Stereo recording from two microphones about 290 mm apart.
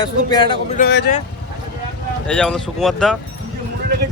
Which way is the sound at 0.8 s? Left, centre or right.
Left.